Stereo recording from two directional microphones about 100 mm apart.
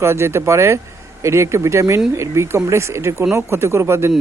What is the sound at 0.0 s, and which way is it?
Speech, 25° right (ahead or behind).